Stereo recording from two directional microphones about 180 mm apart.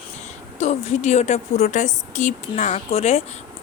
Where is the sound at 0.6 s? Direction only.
40° left (ahead or behind).